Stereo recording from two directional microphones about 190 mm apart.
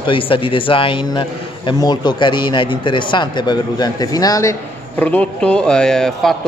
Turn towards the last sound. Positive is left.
turn(degrees=5)  # may be behind; listen again after turning